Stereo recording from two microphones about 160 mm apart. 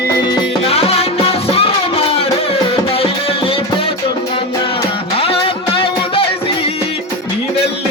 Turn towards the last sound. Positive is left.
turn(degrees=35)  # may be behind; listen again after turning